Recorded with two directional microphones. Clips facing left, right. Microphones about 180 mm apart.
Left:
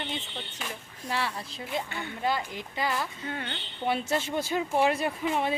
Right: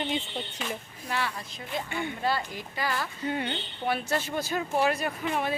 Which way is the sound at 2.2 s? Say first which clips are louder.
Left 3 dB; 20° left (ahead or behind).